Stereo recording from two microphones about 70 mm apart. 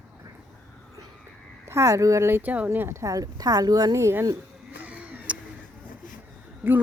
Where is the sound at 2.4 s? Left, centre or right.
Right.